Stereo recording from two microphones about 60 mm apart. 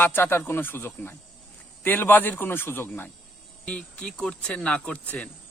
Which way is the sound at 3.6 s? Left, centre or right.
Centre.